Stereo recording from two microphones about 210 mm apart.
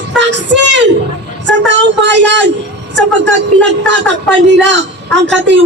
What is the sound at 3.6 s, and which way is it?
A woman's voice, 60° right (ahead or behind).